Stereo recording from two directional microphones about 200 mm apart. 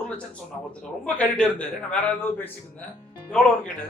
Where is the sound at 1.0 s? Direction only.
5° left (ahead or behind).